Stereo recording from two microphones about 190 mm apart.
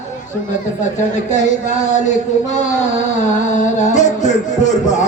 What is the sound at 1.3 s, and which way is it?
Music, 40° left (ahead or behind).